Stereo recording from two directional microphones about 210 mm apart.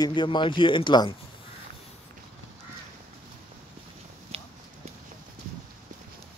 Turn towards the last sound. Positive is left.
turn(degrees=-30)  # may be behind; listen again after turning